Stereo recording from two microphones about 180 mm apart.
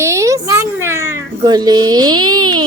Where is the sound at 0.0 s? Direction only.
15° right (ahead or behind).